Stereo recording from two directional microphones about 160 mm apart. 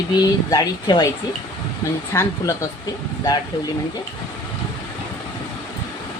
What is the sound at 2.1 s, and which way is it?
Speech, 20° left (ahead or behind).